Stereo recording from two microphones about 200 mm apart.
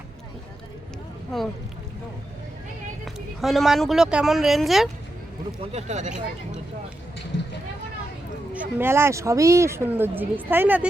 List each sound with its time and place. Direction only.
3.4 s speech: centre (ahead or behind)
5.7 s speech: 35° right (ahead or behind)
8.5 s speech: 10° right (ahead or behind)